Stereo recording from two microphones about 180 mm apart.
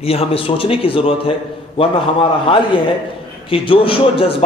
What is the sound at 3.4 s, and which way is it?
Speech, 30° left (ahead or behind).